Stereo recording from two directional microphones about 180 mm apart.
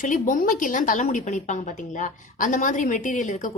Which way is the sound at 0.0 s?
50° left (ahead or behind).